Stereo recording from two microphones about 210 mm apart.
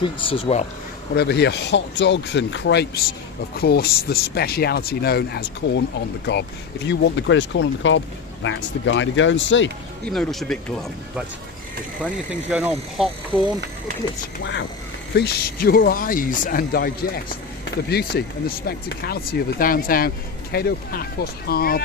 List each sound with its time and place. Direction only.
0.0 s speech: 25° left (ahead or behind)
1.1 s speech: 50° left (ahead or behind)
10.1 s speech: centre (ahead or behind)
12.3 s speech: 5° right (ahead or behind)
15.1 s speech: 50° left (ahead or behind)